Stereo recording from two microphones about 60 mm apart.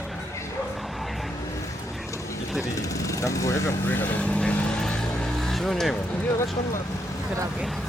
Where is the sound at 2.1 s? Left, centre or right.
Left.